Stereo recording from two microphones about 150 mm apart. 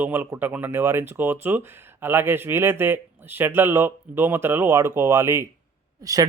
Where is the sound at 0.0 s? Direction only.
10° right (ahead or behind).